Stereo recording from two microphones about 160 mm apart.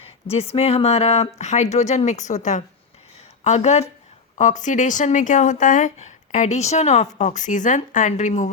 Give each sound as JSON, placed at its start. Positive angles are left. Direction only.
{"t": 0.5, "sound": "speech", "side_deg": 40}